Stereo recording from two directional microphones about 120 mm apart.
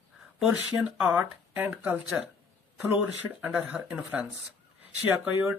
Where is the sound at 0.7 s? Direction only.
5° right (ahead or behind).